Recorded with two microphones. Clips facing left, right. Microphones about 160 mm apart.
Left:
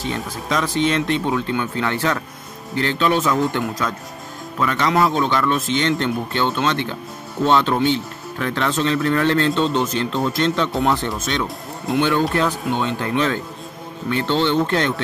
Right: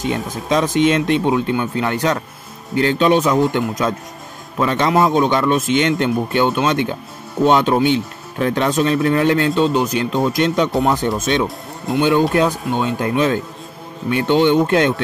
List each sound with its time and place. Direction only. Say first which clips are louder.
0.5 s a man's voice: right 5 dB; 20° right (ahead or behind)
11.4 s speech: right 2 dB; centre (ahead or behind)
12.0 s speech: right 4 dB; 15° right (ahead or behind)